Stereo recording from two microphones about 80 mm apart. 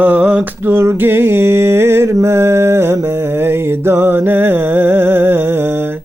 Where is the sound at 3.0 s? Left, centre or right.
Right.